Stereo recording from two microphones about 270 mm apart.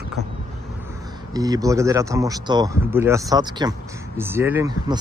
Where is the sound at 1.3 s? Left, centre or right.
Centre.